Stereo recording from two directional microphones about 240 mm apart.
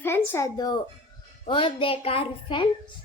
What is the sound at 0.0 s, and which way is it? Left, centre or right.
A child's voice, centre.